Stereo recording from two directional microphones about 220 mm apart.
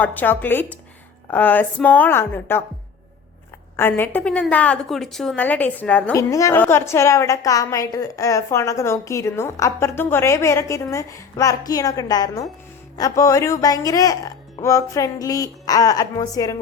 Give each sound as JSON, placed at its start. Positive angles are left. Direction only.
{"t": 0.0, "sound": "a woman's voice", "side_deg": 10}
{"t": 3.8, "sound": "a woman's voice", "side_deg": 10}